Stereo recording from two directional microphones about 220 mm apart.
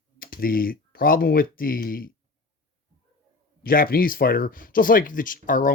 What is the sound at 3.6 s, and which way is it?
Speech, 40° left (ahead or behind).